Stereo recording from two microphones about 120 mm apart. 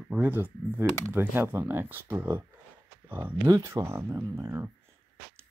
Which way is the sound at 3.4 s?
25° right (ahead or behind).